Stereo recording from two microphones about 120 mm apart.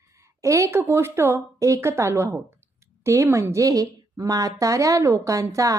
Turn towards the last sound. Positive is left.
turn(degrees=-25)  # may be behind; listen again after turning